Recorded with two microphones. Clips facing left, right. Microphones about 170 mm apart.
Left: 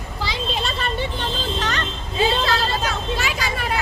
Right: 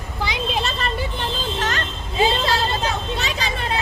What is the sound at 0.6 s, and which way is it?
Vehicle, centre (ahead or behind).